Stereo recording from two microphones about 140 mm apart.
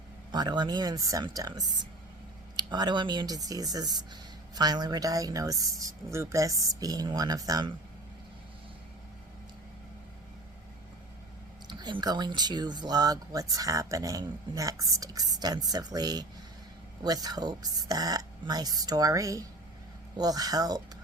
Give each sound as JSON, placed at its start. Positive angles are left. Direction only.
{"t": 0.3, "sound": "speech", "side_deg": -30}
{"t": 11.7, "sound": "speech", "side_deg": -30}